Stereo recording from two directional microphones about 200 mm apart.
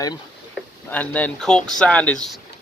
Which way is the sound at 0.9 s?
5° left (ahead or behind).